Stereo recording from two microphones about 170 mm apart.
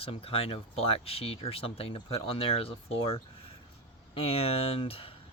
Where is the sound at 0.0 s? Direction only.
35° left (ahead or behind).